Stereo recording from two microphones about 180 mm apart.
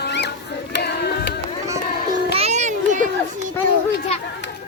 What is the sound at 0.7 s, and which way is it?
Carnatic music, 75° left (ahead or behind).